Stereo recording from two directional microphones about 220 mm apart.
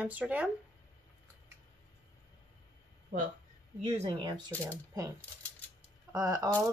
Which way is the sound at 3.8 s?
30° right (ahead or behind).